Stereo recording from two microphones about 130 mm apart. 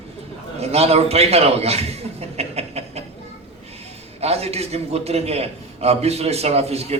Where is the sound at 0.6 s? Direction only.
50° right (ahead or behind).